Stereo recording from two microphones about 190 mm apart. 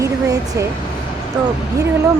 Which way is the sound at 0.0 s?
15° right (ahead or behind).